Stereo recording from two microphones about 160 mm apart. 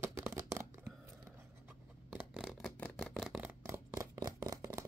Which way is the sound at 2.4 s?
Centre (ahead or behind).